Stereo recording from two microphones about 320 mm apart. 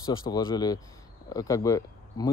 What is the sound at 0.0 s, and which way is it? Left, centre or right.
Speech, centre.